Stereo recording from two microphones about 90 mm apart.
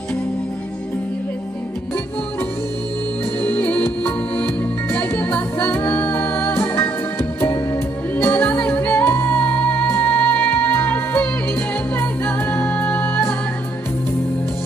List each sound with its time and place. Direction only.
3.4 s music: 15° left (ahead or behind)